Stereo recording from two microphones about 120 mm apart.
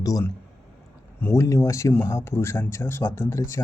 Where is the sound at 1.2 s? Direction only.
15° left (ahead or behind).